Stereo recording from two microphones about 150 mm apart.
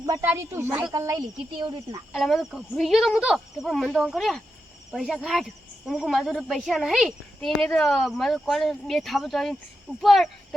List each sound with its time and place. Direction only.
0.0 s speech: 25° right (ahead or behind)
2.1 s speech: centre (ahead or behind)